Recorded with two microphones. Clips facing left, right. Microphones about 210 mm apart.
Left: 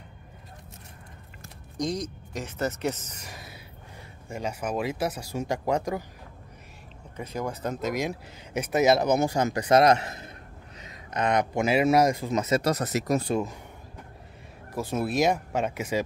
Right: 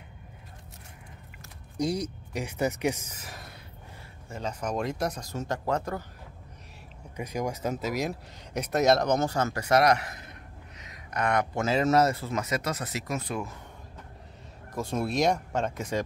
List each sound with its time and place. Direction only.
1.8 s speech: 10° right (ahead or behind)
4.3 s speech: 10° left (ahead or behind)
7.2 s speech: 15° right (ahead or behind); by 13.6 s 25° left (ahead or behind)
14.7 s speech: 5° left (ahead or behind)